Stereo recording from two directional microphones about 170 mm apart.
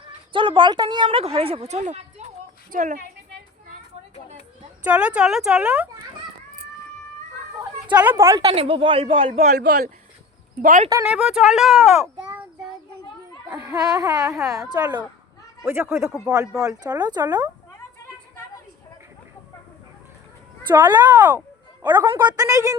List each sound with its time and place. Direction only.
0.0 s a woman's voice: 30° right (ahead or behind); by 3.0 s 50° right (ahead or behind)
4.8 s speech: 5° right (ahead or behind)
8.0 s speech: 15° right (ahead or behind)
8.4 s a woman's voice: 35° right (ahead or behind)
9.6 s speech: 75° right (ahead or behind)
10.6 s speech: 50° right (ahead or behind)
10.8 s speech: 20° right (ahead or behind)
11.1 s speech: 5° right (ahead or behind)
13.7 s speech: 20° right (ahead or behind)
21.0 s a sound: 10° right (ahead or behind)
21.8 s speech: 25° right (ahead or behind)